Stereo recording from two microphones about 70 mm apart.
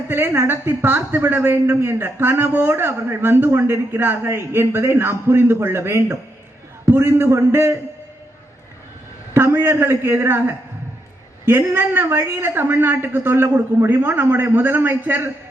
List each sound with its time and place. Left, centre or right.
0.1 s a woman's voice: right
9.3 s a woman's voice: right